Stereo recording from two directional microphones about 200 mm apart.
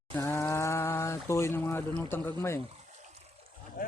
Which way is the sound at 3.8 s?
45° left (ahead or behind).